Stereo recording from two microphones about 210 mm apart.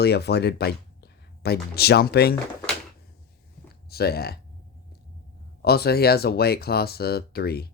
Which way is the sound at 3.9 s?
50° left (ahead or behind).